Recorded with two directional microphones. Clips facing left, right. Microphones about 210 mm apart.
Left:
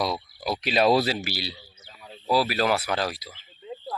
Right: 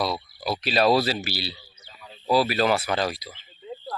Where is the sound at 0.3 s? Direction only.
15° left (ahead or behind).